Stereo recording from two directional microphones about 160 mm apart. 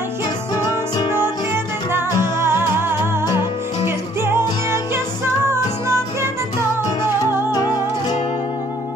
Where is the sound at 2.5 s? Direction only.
15° right (ahead or behind).